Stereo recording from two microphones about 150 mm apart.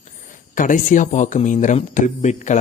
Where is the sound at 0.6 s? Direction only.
60° left (ahead or behind).